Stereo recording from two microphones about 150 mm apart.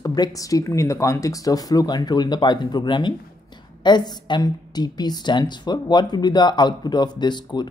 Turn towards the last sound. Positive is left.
turn(degrees=30)  # may be behind; listen again after turning